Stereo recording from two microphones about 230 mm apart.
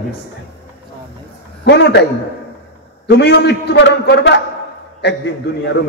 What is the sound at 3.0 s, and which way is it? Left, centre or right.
A man's voice, left.